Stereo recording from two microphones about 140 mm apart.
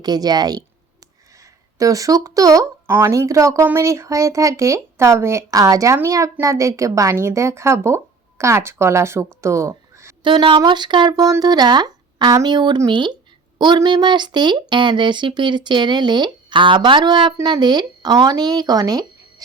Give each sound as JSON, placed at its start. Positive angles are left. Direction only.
{"t": 0.0, "sound": "a woman's voice", "side_deg": -30}
{"t": 10.2, "sound": "speech", "side_deg": -35}